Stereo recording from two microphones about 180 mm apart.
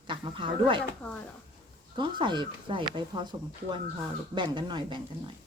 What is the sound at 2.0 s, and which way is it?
Speech, 25° right (ahead or behind).